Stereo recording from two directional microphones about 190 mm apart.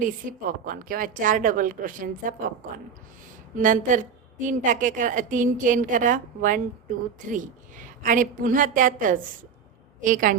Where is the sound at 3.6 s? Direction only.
40° right (ahead or behind).